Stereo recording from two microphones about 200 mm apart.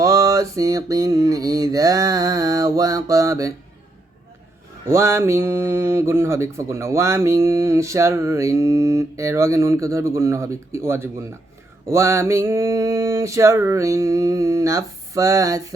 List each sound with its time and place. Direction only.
0.0 s speech: 15° right (ahead or behind)
4.9 s speech: 15° right (ahead or behind)